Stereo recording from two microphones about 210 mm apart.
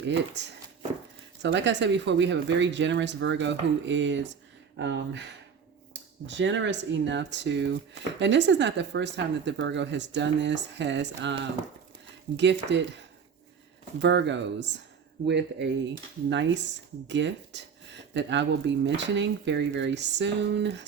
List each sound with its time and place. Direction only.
0.0 s speech: 55° right (ahead or behind)
12.4 s speech: 55° right (ahead or behind)
14.0 s speech: 60° right (ahead or behind)